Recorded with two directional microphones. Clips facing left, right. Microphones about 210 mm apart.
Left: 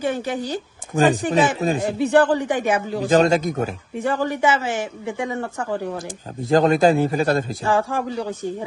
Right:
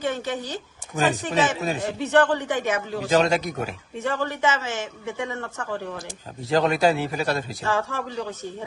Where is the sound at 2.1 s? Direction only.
30° left (ahead or behind).